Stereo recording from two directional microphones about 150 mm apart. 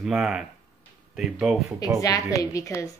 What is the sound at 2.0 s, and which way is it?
Speech, 25° left (ahead or behind).